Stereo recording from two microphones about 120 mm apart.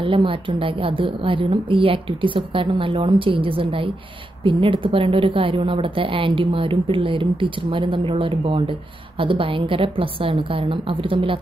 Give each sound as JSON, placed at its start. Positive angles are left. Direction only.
{"t": 0.0, "sound": "a woman's voice", "side_deg": -50}